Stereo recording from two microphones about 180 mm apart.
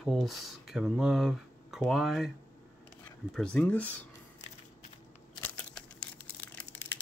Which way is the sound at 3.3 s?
5° left (ahead or behind).